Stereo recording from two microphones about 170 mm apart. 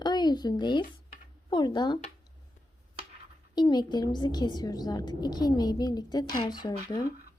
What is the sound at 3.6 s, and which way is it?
A woman's voice, 25° left (ahead or behind).